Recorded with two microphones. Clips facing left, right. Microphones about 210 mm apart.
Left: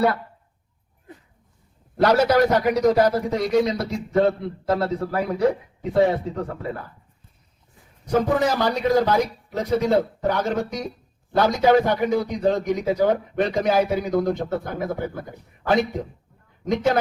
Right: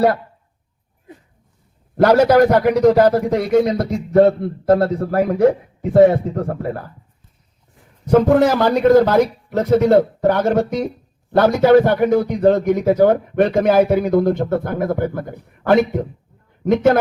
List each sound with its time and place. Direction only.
2.0 s a man's voice: 55° right (ahead or behind)
8.1 s a man's voice: 60° right (ahead or behind)